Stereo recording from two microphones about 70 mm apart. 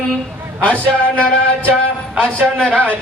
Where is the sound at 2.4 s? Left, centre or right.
Centre.